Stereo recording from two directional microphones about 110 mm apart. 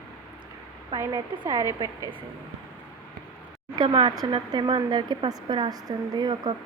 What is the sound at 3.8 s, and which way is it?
Speech, 45° right (ahead or behind).